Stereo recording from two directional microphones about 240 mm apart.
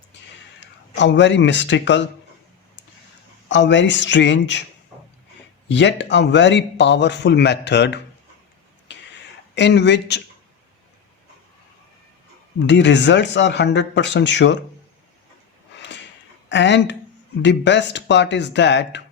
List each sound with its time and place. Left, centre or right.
0.6 s speech: left
3.5 s speech: left
5.6 s speech: left
8.9 s a sound: left
9.6 s speech: left
12.6 s speech: left
16.5 s speech: left